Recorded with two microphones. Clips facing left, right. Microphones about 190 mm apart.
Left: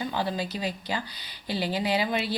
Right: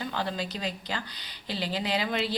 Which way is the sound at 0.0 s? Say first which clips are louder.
Left 3 dB; 10° left (ahead or behind).